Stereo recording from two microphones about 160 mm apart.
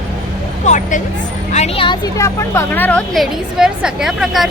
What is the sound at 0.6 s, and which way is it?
Speech, 50° left (ahead or behind).